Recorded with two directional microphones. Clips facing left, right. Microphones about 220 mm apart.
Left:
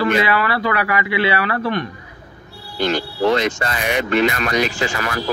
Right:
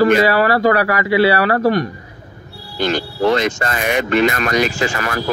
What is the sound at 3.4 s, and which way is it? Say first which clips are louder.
Speech: right 2 dB; 45° right (ahead or behind).